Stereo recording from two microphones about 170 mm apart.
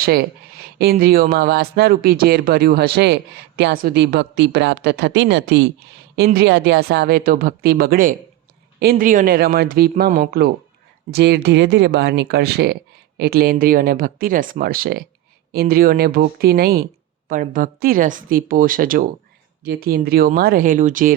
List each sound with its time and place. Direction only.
0.8 s speech: 65° right (ahead or behind); by 5.6 s 90° right
6.1 s speech: 70° right (ahead or behind)
11.1 s speech: 80° right; by 16.8 s 65° right (ahead or behind)
17.2 s speech: 50° right (ahead or behind)